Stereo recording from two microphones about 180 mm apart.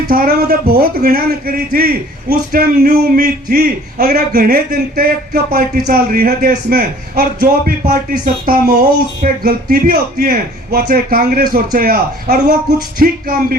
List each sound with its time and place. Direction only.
0.1 s a man's voice: 55° right (ahead or behind)